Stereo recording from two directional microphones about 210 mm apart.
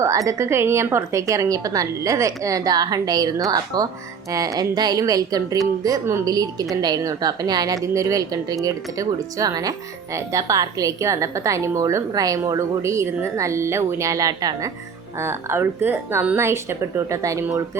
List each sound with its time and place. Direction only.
0.0 s a woman's voice: 15° right (ahead or behind)